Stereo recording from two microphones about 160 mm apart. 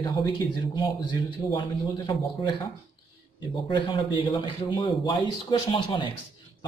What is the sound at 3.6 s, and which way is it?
Speech, 30° left (ahead or behind).